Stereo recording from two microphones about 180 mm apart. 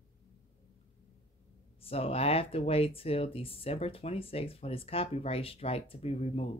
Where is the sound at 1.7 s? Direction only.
30° left (ahead or behind).